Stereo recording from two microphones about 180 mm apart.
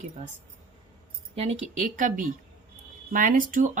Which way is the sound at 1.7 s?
45° right (ahead or behind).